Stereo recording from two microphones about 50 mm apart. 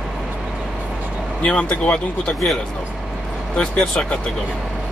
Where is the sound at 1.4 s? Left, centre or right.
Left.